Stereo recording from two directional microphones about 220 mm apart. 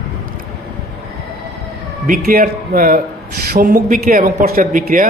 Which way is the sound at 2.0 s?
40° right (ahead or behind).